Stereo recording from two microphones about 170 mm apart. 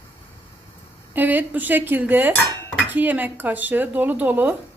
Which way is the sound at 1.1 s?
10° right (ahead or behind).